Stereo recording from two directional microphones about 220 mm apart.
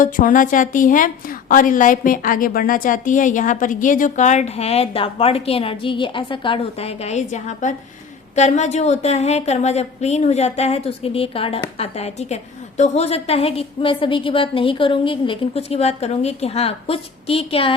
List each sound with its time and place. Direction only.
0.0 s a woman's voice: 35° left (ahead or behind)